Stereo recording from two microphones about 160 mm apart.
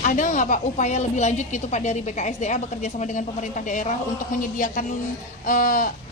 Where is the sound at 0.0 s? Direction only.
55° left (ahead or behind).